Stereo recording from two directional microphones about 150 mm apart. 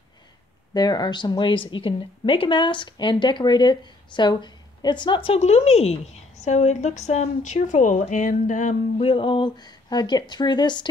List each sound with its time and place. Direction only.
0.7 s a woman's voice: 25° left (ahead or behind); by 9.0 s 55° left (ahead or behind)
9.0 s speech: 35° left (ahead or behind)